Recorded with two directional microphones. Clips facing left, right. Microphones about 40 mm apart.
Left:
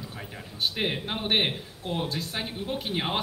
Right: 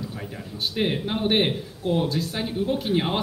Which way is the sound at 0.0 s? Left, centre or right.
Centre.